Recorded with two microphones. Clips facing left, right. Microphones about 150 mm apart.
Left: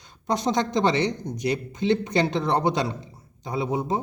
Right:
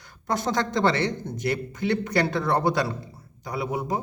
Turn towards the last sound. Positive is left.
turn(degrees=25)  # may be behind; listen again after turning